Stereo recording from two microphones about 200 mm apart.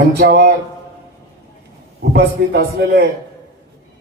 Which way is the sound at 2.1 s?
55° right (ahead or behind).